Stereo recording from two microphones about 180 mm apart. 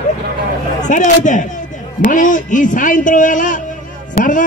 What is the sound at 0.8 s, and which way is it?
A man's voice, 45° left (ahead or behind).